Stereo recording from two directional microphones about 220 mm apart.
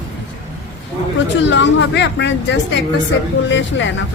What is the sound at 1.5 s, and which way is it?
A woman's voice, 55° left (ahead or behind).